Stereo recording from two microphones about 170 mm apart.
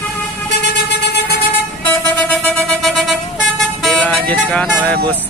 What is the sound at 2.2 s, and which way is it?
Music, 5° left (ahead or behind).